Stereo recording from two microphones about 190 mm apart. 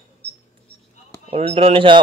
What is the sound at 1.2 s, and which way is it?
Speech, 30° right (ahead or behind).